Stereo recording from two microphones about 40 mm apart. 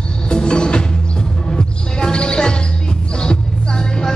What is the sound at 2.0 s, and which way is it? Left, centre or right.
Music, left.